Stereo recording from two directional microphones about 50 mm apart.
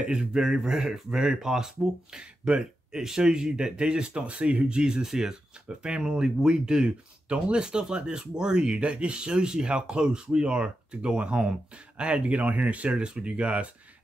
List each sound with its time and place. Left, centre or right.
0.0 s speech: centre